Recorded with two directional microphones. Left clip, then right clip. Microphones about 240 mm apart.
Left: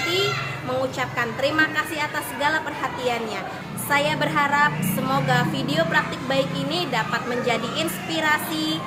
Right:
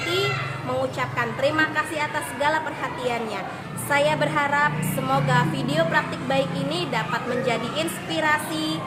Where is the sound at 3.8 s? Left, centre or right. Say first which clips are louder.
Right 1 dB; centre.